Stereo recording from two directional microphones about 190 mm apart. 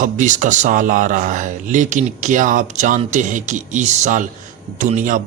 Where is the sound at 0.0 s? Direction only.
40° right (ahead or behind).